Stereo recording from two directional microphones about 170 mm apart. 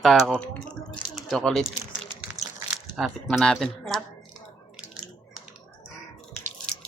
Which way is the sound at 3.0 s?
Centre (ahead or behind).